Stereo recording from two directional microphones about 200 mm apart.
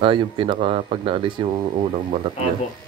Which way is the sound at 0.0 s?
25° right (ahead or behind).